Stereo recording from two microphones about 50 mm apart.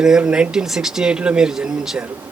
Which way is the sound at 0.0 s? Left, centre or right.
Centre.